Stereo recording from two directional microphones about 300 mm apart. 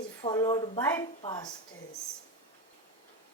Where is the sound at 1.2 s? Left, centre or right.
Centre.